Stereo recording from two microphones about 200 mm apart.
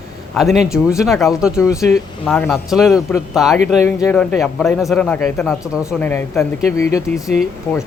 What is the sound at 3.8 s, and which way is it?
Speech, 10° left (ahead or behind).